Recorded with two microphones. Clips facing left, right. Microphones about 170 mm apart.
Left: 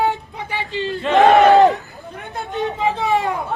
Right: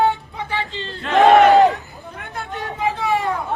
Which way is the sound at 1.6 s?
20° left (ahead or behind).